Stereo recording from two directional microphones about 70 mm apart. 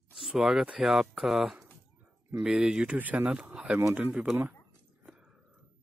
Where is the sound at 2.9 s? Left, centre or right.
Right.